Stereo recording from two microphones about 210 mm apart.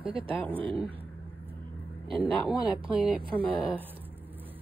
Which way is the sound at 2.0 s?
25° right (ahead or behind).